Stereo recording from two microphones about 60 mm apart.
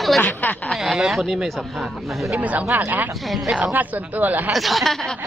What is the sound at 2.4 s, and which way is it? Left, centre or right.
Speech, right.